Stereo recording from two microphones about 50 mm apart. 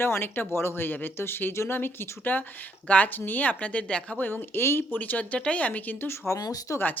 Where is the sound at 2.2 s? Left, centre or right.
Left.